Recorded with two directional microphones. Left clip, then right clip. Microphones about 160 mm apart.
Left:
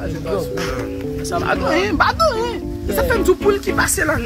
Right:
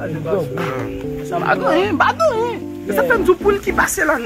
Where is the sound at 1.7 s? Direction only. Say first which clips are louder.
Even; 30° left (ahead or behind).